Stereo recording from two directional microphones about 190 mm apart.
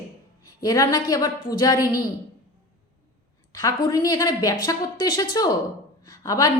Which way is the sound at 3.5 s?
20° left (ahead or behind).